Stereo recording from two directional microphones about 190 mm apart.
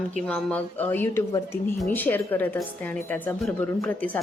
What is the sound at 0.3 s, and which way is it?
A woman's voice, 10° left (ahead or behind).